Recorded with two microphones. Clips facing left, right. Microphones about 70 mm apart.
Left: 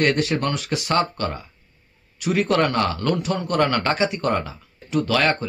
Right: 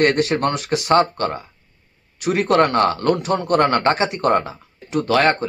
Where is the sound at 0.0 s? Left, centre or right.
Right.